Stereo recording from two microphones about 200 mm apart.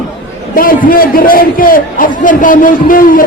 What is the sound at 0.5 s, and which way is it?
A man's voice, 45° left (ahead or behind).